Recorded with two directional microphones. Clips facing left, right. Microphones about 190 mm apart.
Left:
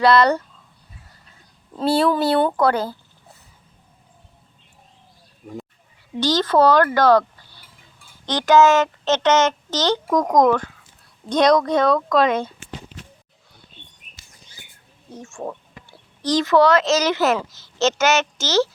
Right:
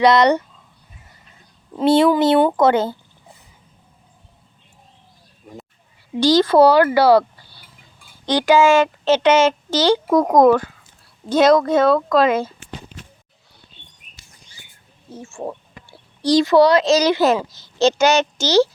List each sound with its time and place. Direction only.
0.0 s speech: 20° right (ahead or behind)
1.7 s speech: 20° right (ahead or behind)
6.1 s a woman's voice: 10° right (ahead or behind)
15.1 s a woman's voice: 10° right (ahead or behind)
15.4 s a sound: 15° right (ahead or behind)
16.6 s a woman's voice: 15° right (ahead or behind)